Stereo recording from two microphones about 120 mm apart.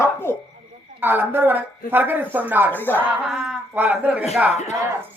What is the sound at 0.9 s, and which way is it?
A woman's voice, 15° right (ahead or behind).